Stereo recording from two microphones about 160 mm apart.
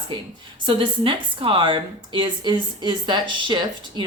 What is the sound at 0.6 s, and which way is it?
Speech, 30° right (ahead or behind).